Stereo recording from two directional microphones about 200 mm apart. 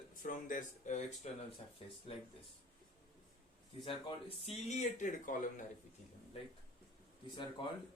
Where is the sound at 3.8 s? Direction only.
25° left (ahead or behind); by 5.7 s 40° left (ahead or behind).